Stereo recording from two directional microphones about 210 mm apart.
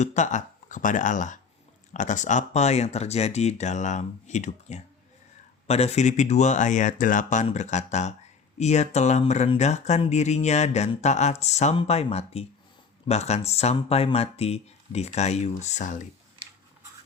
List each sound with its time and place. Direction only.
0.0 s speech: 35° left (ahead or behind)